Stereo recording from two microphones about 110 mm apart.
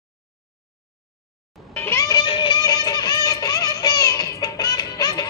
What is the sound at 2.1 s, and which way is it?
Music, 45° left (ahead or behind).